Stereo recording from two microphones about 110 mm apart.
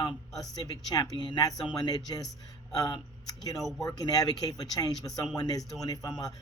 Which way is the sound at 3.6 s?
Centre (ahead or behind).